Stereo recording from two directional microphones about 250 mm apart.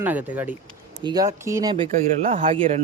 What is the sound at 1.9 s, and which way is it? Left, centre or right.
Speech, right.